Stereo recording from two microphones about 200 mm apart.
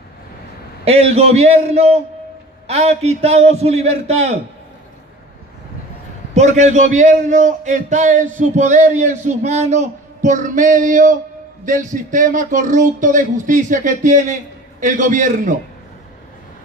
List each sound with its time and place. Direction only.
0.8 s a man's voice: 30° right (ahead or behind)
6.3 s a man's voice: 35° right (ahead or behind)